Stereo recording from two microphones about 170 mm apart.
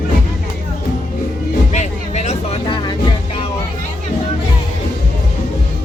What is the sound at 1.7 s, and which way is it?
Vehicle, 40° left (ahead or behind).